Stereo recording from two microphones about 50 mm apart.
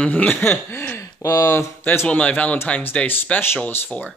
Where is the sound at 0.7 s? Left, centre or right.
Left.